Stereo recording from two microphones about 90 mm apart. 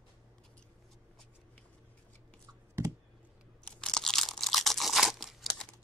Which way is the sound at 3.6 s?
5° left (ahead or behind).